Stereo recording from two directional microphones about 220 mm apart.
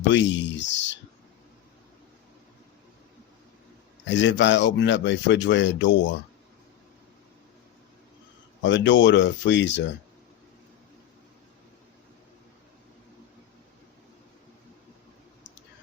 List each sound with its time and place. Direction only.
0.1 s speech: 55° left (ahead or behind)
4.0 s speech: 55° left (ahead or behind)
8.6 s speech: 55° left (ahead or behind)